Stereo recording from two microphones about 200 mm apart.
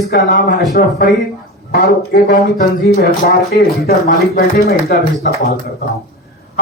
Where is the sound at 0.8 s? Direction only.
45° left (ahead or behind).